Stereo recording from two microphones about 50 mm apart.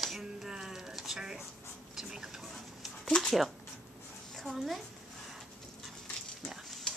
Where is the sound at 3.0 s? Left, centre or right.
Centre.